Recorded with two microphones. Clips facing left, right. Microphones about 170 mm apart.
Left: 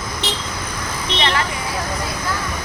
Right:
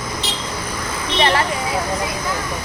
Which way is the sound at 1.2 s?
30° right (ahead or behind).